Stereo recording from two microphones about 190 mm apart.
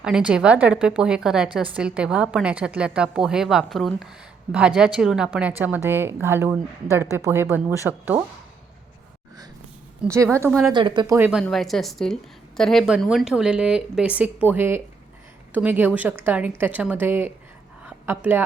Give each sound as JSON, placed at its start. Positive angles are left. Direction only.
{"t": 0.0, "sound": "a woman's voice", "side_deg": -5}
{"t": 10.0, "sound": "a woman's voice", "side_deg": -5}
{"t": 10.8, "sound": "speech", "side_deg": -25}
{"t": 11.4, "sound": "a woman's voice", "side_deg": 0}
{"t": 17.8, "sound": "a sound", "side_deg": -10}